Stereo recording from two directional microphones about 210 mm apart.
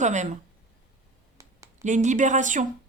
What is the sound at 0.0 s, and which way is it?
Speech, 35° right (ahead or behind).